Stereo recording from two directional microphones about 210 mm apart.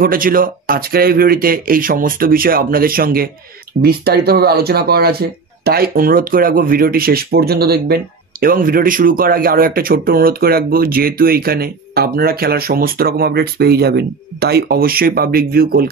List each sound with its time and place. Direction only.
0.0 s speech: 45° right (ahead or behind)